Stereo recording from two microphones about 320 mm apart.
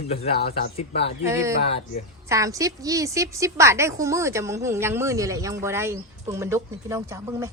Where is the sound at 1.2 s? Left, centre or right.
Centre.